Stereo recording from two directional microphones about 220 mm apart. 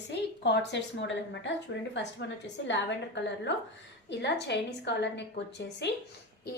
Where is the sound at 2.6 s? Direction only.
55° left (ahead or behind).